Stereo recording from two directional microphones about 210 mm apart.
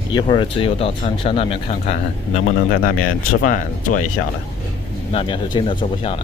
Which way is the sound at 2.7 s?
45° left (ahead or behind).